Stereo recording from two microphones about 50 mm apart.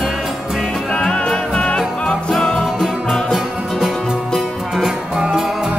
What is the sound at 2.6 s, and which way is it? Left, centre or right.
Music, centre.